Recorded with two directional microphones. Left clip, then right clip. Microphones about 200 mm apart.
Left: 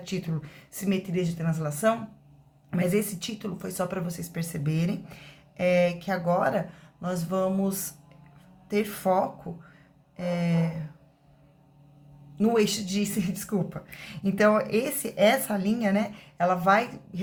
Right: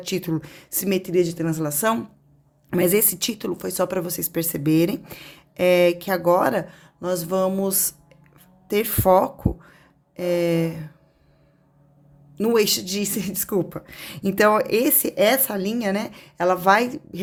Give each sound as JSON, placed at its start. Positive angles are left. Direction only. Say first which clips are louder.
{"t": 0.0, "sound": "speech", "louder": "right 9 dB", "side_deg": -60}
{"t": 12.4, "sound": "speech", "louder": "right 5 dB", "side_deg": -55}